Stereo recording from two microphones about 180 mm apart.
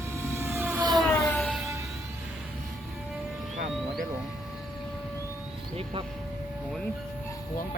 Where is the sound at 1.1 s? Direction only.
10° left (ahead or behind).